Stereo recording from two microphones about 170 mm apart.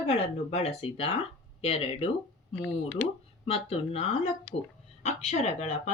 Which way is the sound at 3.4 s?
35° left (ahead or behind).